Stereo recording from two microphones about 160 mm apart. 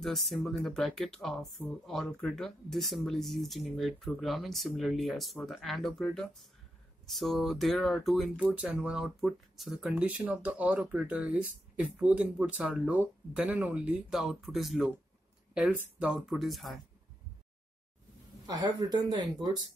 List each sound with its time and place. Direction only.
0.0 s speech: centre (ahead or behind)
18.5 s speech: 25° right (ahead or behind)